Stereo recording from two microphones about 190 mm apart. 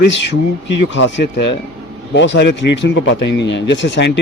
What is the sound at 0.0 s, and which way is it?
Speech, 70° left (ahead or behind).